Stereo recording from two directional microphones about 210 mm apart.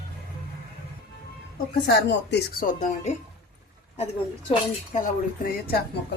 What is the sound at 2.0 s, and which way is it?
Speech, 50° left (ahead or behind).